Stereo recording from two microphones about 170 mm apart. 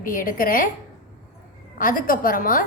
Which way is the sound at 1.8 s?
55° left (ahead or behind).